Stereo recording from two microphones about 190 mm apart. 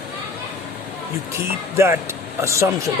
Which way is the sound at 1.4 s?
15° right (ahead or behind).